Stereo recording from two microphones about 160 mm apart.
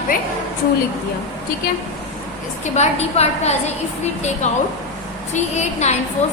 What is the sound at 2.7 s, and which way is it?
A woman's voice, 40° left (ahead or behind).